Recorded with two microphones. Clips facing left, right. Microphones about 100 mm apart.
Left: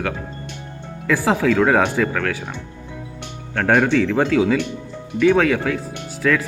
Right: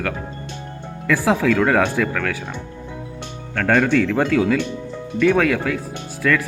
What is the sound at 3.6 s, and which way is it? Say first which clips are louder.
Speech: left 1 dB; 15° left (ahead or behind).